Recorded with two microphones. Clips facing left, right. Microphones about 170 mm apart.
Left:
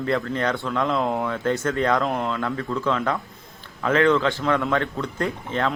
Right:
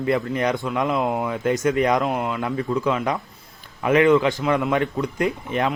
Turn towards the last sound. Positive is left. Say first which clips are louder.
# right 2 dB
turn(degrees=-15)  # may be behind; listen again after turning